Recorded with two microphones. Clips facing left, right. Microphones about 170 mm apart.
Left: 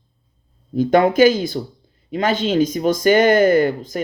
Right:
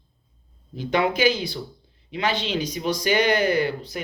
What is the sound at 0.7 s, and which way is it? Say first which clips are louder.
Speech: left 8 dB; 45° left (ahead or behind).